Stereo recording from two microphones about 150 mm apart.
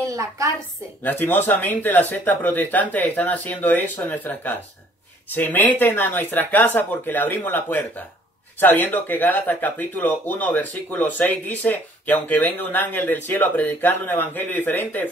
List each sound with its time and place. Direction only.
0.0 s a woman's voice: 20° right (ahead or behind)
1.0 s speech: 15° left (ahead or behind)